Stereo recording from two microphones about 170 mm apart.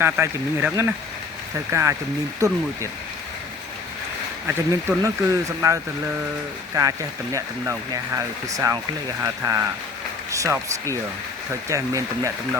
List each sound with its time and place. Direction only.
0.0 s speech: 15° right (ahead or behind)
4.4 s speech: 15° right (ahead or behind)
11.7 s speech: 20° right (ahead or behind)